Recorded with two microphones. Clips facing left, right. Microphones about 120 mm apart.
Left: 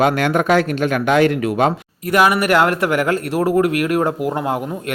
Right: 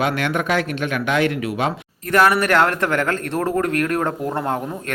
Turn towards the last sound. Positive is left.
turn(degrees=5)  # may be behind; listen again after turning